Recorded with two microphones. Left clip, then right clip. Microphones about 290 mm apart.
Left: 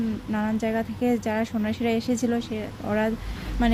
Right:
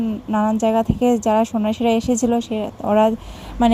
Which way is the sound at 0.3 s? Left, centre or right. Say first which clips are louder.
Right 10 dB; centre.